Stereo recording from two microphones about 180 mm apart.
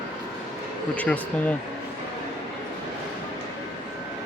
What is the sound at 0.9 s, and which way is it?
Speech, 10° left (ahead or behind).